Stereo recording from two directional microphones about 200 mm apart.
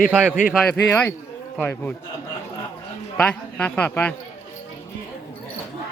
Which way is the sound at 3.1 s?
5° left (ahead or behind).